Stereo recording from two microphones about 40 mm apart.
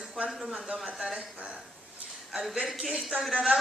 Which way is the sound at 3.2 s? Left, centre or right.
Centre.